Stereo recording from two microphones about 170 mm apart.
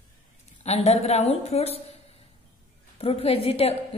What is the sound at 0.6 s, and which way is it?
A woman's voice, 40° left (ahead or behind).